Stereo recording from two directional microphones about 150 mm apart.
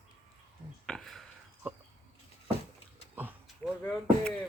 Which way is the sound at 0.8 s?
5° left (ahead or behind).